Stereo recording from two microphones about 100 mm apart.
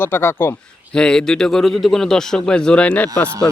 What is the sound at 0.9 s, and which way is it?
Speech, 10° left (ahead or behind).